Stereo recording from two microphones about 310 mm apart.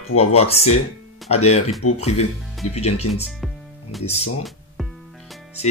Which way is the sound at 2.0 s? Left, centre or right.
Centre.